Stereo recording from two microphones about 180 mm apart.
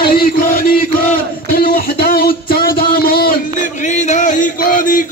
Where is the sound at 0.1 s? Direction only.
55° left (ahead or behind).